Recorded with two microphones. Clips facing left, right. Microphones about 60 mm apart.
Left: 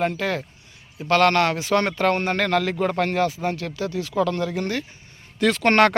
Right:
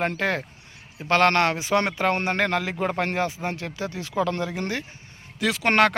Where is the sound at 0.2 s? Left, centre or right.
Right.